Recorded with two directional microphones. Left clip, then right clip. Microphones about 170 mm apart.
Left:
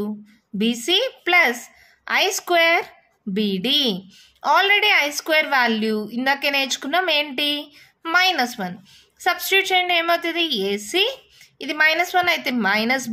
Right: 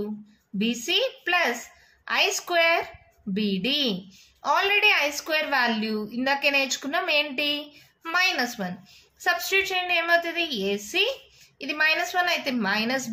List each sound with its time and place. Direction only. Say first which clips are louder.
0.6 s a woman's voice: left 5 dB; 50° left (ahead or behind)